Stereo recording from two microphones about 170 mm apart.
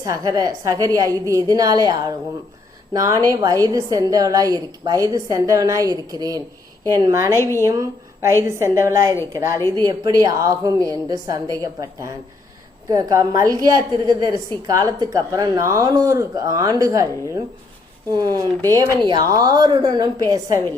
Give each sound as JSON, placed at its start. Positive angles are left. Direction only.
{"t": 0.0, "sound": "a woman's voice", "side_deg": -20}
{"t": 7.3, "sound": "a woman's voice", "side_deg": 15}
{"t": 7.6, "sound": "a woman's voice", "side_deg": -15}
{"t": 18.7, "sound": "a woman's voice", "side_deg": -25}